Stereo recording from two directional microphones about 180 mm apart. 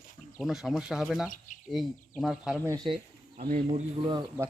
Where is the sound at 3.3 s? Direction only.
55° right (ahead or behind).